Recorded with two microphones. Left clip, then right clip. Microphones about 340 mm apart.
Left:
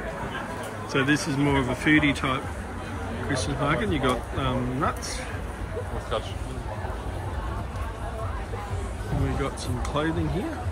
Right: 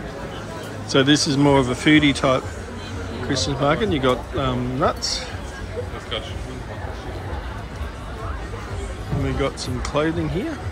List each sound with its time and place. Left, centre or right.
0.9 s speech: centre
9.9 s speech: centre